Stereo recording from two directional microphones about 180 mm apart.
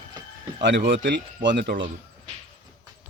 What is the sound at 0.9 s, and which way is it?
Speech, 85° right.